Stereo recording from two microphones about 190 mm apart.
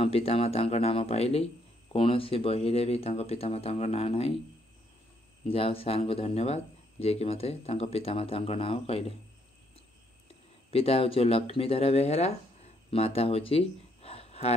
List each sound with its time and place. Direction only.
0.0 s speech: 30° left (ahead or behind)
5.5 s speech: 30° left (ahead or behind)
10.7 s speech: 30° left (ahead or behind)